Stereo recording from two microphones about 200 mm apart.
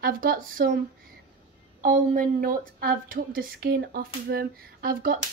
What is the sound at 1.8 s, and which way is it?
A woman's voice, 40° right (ahead or behind).